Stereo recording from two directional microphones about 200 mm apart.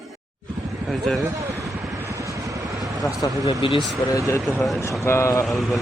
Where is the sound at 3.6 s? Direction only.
25° left (ahead or behind).